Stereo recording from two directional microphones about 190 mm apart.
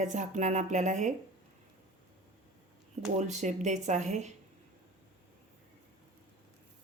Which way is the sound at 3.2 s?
40° right (ahead or behind).